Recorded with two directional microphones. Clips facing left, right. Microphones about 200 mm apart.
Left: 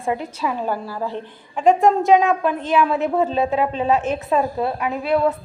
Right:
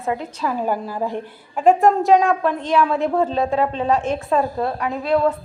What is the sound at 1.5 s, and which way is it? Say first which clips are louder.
A woman's voice: right 1 dB; centre (ahead or behind).